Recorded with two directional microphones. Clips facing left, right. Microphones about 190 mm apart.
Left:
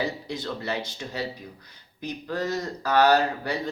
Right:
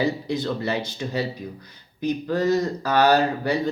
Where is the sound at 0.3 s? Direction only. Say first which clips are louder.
Right 6 dB; 15° right (ahead or behind).